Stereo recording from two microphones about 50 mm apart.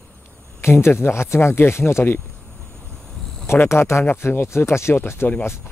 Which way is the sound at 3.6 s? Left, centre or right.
Left.